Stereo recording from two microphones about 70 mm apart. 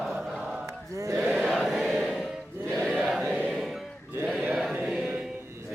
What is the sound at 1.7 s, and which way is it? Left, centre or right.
Choir, centre.